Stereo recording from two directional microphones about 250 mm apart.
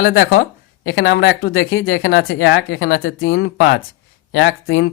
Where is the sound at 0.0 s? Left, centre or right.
Left.